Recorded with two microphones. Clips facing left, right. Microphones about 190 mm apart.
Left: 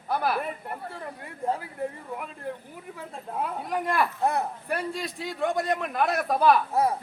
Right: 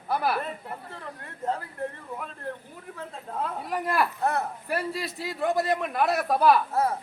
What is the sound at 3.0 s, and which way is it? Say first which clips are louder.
Speech: even; 10° left (ahead or behind).